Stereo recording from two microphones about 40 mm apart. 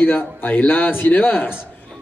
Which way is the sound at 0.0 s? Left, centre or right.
Left.